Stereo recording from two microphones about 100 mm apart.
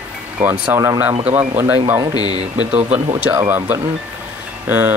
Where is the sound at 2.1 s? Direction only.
45° left (ahead or behind).